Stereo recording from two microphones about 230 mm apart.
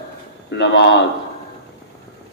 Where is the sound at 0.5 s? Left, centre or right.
Left.